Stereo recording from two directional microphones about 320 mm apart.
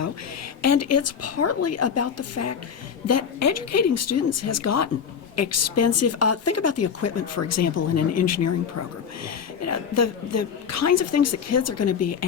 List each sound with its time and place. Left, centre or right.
0.6 s speech: left